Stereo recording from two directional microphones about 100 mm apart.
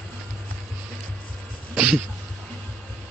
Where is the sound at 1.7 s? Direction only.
5° right (ahead or behind).